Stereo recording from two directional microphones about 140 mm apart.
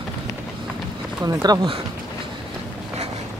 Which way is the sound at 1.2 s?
30° right (ahead or behind).